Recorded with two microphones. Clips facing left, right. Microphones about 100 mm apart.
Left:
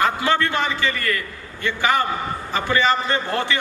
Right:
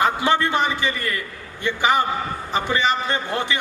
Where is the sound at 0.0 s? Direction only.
20° right (ahead or behind).